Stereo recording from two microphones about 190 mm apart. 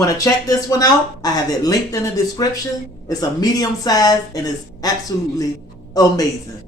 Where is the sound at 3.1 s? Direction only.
20° left (ahead or behind).